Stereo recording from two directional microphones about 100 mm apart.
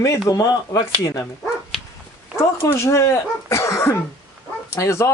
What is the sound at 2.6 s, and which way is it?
A man's voice, 30° left (ahead or behind).